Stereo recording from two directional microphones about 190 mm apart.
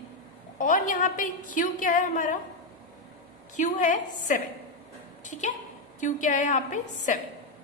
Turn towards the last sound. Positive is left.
turn(degrees=40)  # may be behind; listen again after turning